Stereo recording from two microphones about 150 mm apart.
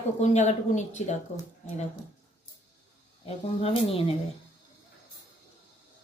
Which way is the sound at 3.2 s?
40° left (ahead or behind).